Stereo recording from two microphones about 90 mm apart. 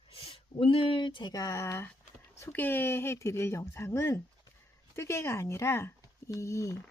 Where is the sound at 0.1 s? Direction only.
90° left.